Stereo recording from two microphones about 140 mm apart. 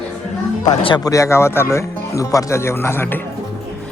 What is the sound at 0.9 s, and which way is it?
Speech, 25° left (ahead or behind).